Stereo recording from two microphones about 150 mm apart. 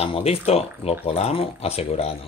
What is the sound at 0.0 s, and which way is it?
Speech, 40° left (ahead or behind).